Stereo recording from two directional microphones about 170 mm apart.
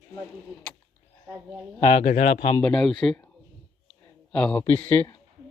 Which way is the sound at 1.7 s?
30° left (ahead or behind).